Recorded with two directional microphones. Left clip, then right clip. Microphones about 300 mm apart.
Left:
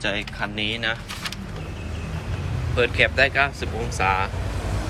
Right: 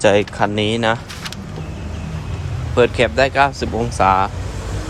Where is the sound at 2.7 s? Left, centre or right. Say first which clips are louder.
Right 5 dB; centre.